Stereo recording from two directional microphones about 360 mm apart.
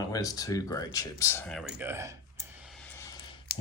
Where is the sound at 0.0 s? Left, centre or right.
Centre.